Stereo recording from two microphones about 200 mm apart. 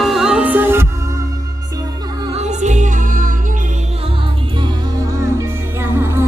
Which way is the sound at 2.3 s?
35° right (ahead or behind).